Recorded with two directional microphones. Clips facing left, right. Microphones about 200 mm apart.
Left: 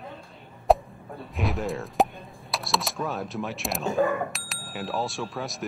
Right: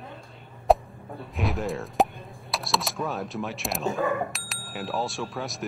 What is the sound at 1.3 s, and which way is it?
Speech, centre (ahead or behind).